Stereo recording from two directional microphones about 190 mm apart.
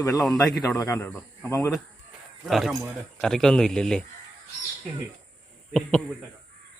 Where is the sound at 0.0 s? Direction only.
15° left (ahead or behind).